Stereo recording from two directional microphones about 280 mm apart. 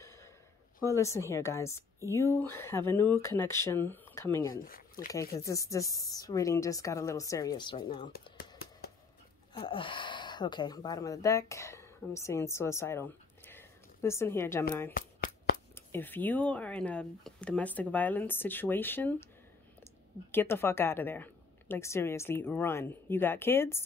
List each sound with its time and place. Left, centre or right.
0.9 s a woman's voice: centre
8.1 s a sound: left
9.5 s a woman's voice: centre
20.2 s a woman's voice: centre